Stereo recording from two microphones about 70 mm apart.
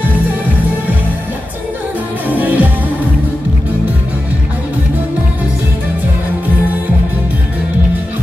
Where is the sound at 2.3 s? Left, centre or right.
Right.